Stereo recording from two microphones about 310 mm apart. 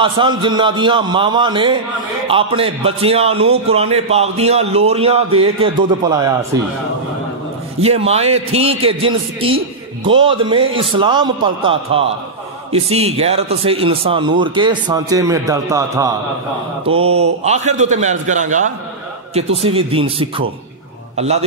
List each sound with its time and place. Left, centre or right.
0.0 s a man's voice: centre
7.8 s a man's voice: centre
17.0 s mantra: right
17.4 s a man's voice: right